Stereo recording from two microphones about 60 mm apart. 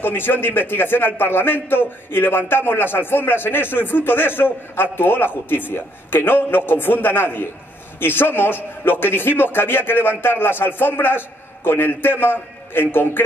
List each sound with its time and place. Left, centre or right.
0.0 s a man's voice: left